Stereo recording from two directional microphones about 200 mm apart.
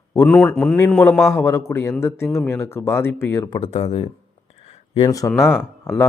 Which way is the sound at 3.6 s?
30° left (ahead or behind).